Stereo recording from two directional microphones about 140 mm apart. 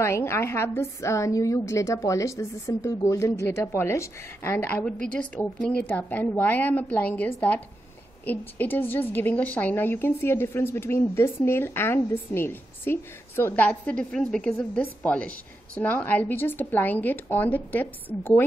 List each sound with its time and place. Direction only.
0.0 s a woman's voice: 20° left (ahead or behind)